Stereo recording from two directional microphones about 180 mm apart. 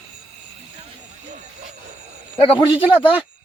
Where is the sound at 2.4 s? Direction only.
30° left (ahead or behind).